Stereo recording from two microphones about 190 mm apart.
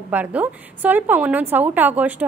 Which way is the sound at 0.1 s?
10° right (ahead or behind).